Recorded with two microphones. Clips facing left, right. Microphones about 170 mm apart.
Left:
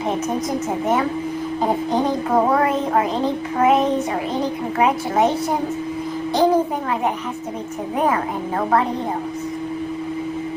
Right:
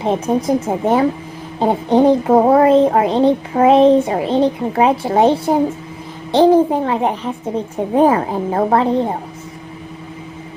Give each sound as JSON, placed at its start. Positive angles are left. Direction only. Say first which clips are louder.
{"t": 0.0, "sound": "a child's voice", "louder": "right 5 dB", "side_deg": -30}